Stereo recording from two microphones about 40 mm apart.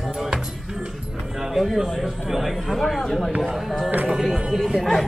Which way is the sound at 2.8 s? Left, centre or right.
Centre.